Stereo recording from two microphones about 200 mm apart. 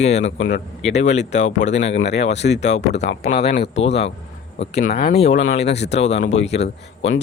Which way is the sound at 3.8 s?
30° left (ahead or behind).